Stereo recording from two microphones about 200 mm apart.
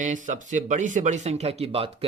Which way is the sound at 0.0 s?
40° right (ahead or behind).